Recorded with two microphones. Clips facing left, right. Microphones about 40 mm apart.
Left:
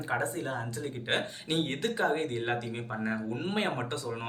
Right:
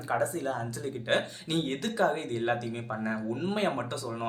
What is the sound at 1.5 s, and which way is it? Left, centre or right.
Speech, left.